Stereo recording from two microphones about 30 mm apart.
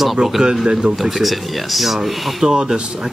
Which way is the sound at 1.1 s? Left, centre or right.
Centre.